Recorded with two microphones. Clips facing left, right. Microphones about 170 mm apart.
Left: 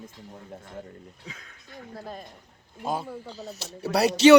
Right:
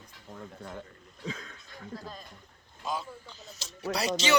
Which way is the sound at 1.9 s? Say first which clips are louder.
Left 3 dB; 60° left (ahead or behind).